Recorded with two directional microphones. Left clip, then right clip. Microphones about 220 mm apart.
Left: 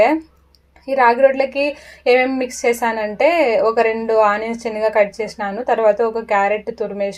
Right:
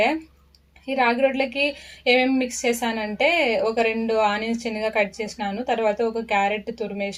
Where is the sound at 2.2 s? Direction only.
20° left (ahead or behind).